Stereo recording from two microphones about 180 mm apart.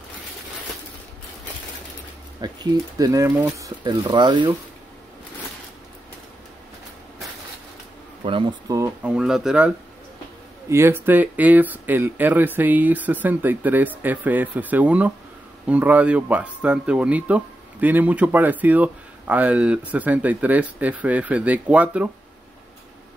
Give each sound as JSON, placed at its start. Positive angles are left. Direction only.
{"t": 2.4, "sound": "speech", "side_deg": -20}
{"t": 8.2, "sound": "speech", "side_deg": -25}
{"t": 9.0, "sound": "speech", "side_deg": -5}
{"t": 10.7, "sound": "speech", "side_deg": -15}